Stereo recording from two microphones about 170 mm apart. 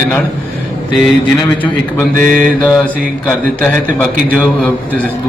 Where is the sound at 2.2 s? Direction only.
50° right (ahead or behind).